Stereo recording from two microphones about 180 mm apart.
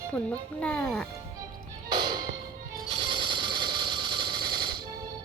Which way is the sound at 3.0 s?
25° right (ahead or behind).